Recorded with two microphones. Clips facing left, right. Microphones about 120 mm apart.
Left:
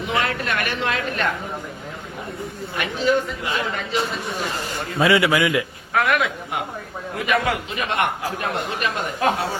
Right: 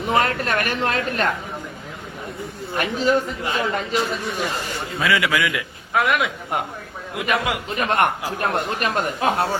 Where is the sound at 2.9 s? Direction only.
40° right (ahead or behind).